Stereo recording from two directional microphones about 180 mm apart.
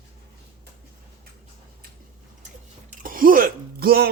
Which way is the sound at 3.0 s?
50° right (ahead or behind).